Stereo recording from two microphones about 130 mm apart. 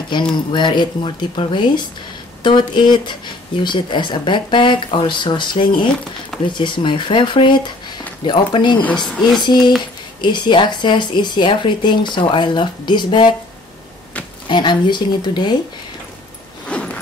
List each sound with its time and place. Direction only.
0.1 s speech: 35° left (ahead or behind)
8.8 s speech: 5° left (ahead or behind)
9.4 s speech: 35° left (ahead or behind)
14.5 s speech: 35° left (ahead or behind)
16.6 s a sound: 10° left (ahead or behind)